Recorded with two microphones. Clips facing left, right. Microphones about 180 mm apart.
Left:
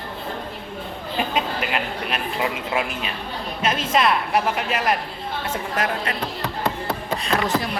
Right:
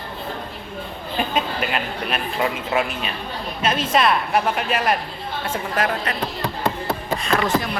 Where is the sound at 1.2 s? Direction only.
20° left (ahead or behind).